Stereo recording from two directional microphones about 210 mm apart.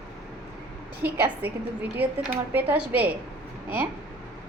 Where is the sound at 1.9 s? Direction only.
10° right (ahead or behind).